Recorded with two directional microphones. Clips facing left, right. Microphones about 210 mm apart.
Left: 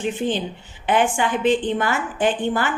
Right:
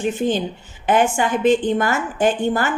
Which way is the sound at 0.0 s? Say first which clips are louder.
Right 3 dB; 45° right (ahead or behind).